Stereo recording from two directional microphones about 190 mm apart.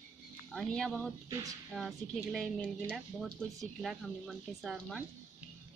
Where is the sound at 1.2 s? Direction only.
15° right (ahead or behind).